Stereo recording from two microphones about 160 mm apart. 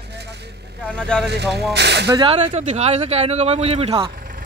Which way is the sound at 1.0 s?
5° left (ahead or behind).